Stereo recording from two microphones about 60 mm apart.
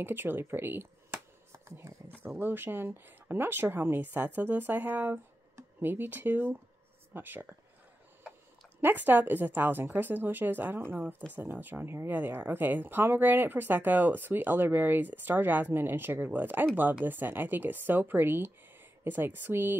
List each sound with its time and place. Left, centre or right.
0.0 s a sound: right
2.0 s speech: right
8.8 s speech: right
12.1 s speech: right